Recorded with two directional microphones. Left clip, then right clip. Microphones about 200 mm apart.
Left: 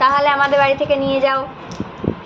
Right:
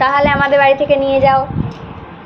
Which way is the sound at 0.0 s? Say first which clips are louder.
Right 1 dB; 15° right (ahead or behind).